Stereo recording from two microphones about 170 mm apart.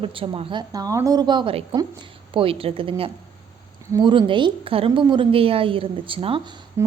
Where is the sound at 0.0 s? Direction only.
30° right (ahead or behind).